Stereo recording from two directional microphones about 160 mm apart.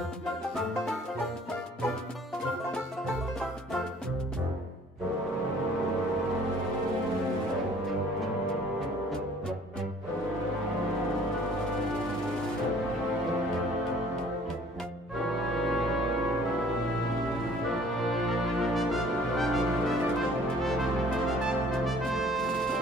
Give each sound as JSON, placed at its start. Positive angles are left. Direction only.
{"t": 0.6, "sound": "music", "side_deg": 0}
{"t": 18.3, "sound": "brass instrument", "side_deg": 0}
{"t": 21.8, "sound": "brass instrument", "side_deg": 0}